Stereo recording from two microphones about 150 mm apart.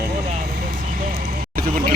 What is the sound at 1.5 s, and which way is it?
Speech, 75° right (ahead or behind).